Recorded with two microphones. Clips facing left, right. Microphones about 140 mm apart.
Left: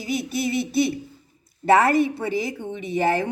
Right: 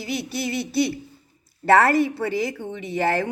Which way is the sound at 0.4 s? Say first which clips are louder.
Left 1 dB; 20° left (ahead or behind).